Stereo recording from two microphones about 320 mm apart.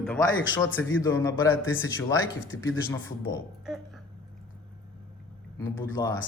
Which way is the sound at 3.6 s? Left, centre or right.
Centre.